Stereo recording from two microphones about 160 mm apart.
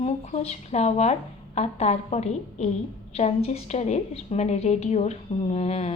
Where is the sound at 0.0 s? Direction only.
40° left (ahead or behind).